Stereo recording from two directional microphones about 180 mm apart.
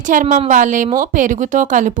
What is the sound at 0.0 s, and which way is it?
A woman's voice, 45° right (ahead or behind).